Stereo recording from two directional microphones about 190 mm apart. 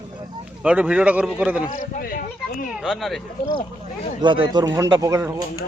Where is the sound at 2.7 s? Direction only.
Centre (ahead or behind).